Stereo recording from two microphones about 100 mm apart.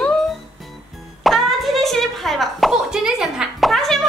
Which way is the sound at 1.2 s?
Centre (ahead or behind).